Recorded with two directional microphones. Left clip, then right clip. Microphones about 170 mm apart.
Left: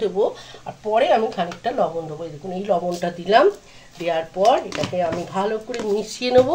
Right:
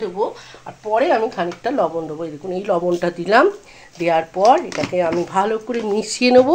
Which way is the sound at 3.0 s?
40° right (ahead or behind).